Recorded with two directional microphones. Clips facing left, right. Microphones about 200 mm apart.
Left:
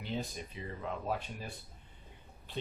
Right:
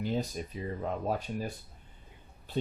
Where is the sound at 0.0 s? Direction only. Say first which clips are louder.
Right 6 dB; 45° right (ahead or behind).